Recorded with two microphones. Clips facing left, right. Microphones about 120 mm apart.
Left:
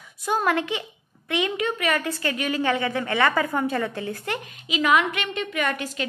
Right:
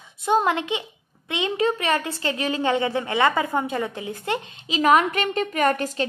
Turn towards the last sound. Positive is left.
turn(degrees=-40)  # may be behind; listen again after turning